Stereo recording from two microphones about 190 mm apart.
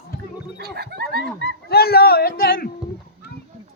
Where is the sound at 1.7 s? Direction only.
55° left (ahead or behind).